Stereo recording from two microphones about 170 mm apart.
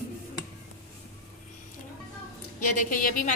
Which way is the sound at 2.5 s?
55° left (ahead or behind).